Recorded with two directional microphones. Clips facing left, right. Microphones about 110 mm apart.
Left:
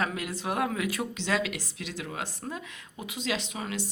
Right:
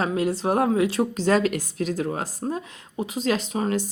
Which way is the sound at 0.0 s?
30° right (ahead or behind).